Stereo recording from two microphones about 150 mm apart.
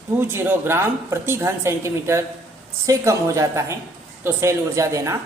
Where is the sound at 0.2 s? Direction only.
15° right (ahead or behind).